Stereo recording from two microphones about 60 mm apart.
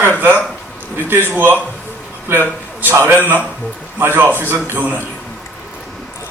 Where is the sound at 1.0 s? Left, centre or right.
Right.